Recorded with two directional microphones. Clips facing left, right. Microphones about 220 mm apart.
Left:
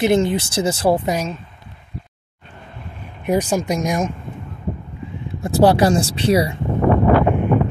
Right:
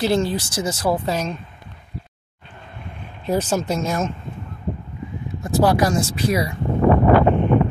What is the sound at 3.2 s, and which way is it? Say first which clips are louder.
Speech: left 2 dB; 10° left (ahead or behind).